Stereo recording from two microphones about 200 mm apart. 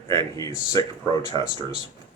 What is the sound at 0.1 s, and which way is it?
Speech, 15° left (ahead or behind).